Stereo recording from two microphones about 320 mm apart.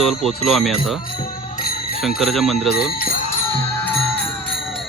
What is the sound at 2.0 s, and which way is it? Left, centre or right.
Music, centre.